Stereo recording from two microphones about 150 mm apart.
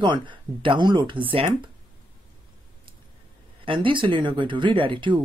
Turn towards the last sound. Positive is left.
turn(degrees=-35)  # may be behind; listen again after turning